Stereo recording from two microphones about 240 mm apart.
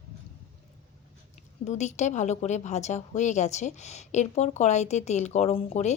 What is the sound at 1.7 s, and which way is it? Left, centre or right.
A woman's voice, left.